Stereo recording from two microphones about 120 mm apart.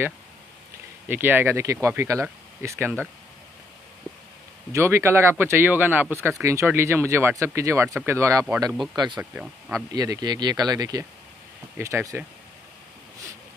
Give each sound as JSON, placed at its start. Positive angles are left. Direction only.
{"t": 1.0, "sound": "speech", "side_deg": -15}
{"t": 4.7, "sound": "speech", "side_deg": -20}
{"t": 8.9, "sound": "speech", "side_deg": -40}
{"t": 9.2, "sound": "speech", "side_deg": -15}
{"t": 9.9, "sound": "speech", "side_deg": -30}